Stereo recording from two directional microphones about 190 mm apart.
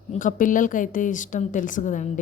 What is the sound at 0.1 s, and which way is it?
A woman's voice, 45° left (ahead or behind).